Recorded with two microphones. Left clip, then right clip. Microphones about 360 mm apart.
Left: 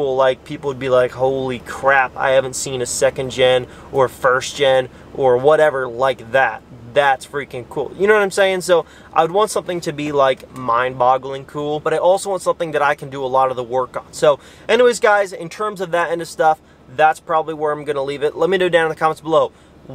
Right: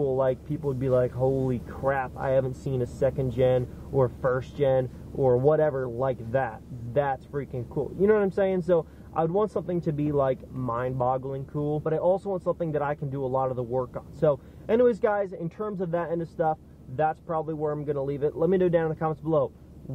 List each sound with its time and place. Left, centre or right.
0.2 s speech: centre
1.2 s speech: centre
1.5 s speech: centre